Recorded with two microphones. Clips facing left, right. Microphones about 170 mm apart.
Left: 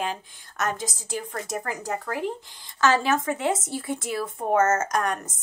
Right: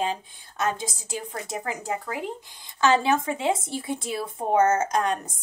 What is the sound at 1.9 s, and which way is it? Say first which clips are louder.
A woman's voice: left 4 dB; 15° right (ahead or behind).